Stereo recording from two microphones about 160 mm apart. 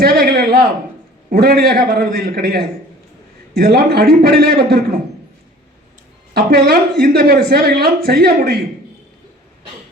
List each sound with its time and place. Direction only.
0.0 s a sound: 75° right (ahead or behind)
1.3 s a man's voice: 75° right (ahead or behind)
6.3 s a man's voice: 80° right